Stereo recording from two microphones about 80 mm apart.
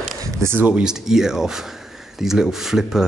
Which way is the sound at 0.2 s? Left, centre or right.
Right.